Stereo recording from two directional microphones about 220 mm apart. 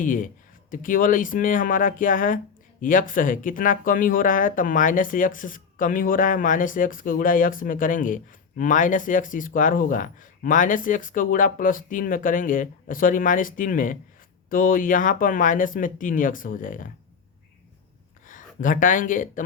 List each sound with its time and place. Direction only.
0.0 s speech: 40° left (ahead or behind)
18.3 s speech: 35° left (ahead or behind)